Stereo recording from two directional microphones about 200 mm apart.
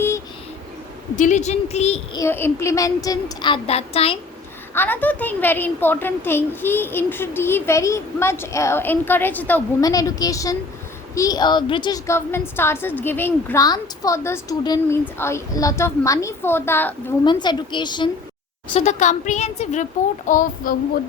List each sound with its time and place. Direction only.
1.1 s a child's voice: 40° left (ahead or behind)
2.1 s a woman's voice: 10° left (ahead or behind); by 4.2 s 30° left (ahead or behind)
4.7 s a woman's voice: 10° left (ahead or behind)
17.2 s a woman's voice: 20° left (ahead or behind)
18.7 s a child's voice: 35° left (ahead or behind)